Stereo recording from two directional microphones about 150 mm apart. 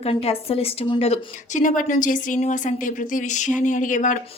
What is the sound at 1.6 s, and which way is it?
Speech, 60° left (ahead or behind).